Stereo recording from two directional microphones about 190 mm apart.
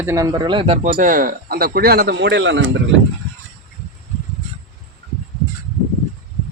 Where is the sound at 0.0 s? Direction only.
15° right (ahead or behind).